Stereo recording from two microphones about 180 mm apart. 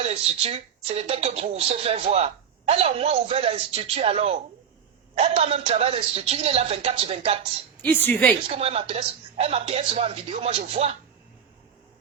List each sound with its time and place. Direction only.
0.1 s speech: 35° right (ahead or behind)
7.8 s a woman's voice: 10° left (ahead or behind)
8.4 s speech: 30° right (ahead or behind)